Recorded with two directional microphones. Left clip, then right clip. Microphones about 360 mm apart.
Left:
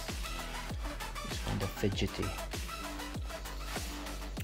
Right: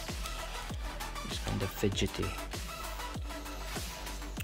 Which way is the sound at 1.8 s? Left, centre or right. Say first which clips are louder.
Right 3 dB; centre.